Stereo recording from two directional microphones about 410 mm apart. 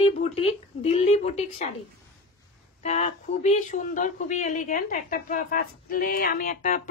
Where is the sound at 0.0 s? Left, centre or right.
Centre.